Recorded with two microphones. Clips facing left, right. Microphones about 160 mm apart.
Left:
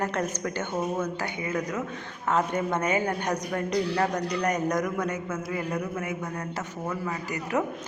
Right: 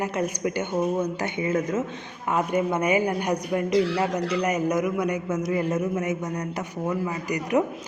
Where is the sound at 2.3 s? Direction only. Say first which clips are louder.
Right 2 dB; 10° right (ahead or behind).